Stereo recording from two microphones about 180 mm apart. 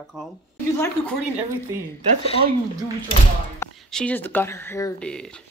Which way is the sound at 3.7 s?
5° left (ahead or behind).